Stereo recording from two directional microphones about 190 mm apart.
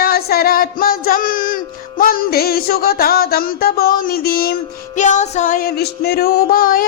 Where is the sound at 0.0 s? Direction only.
55° left (ahead or behind).